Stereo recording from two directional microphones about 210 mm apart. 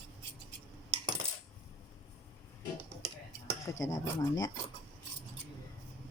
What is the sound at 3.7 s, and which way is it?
Speech, 15° left (ahead or behind).